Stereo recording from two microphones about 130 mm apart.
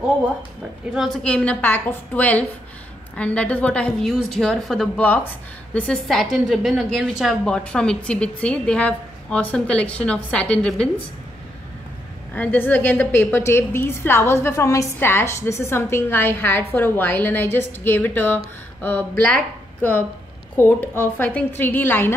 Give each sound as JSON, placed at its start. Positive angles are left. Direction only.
{"t": 0.9, "sound": "a woman's voice", "side_deg": 0}
{"t": 12.4, "sound": "a woman's voice", "side_deg": 15}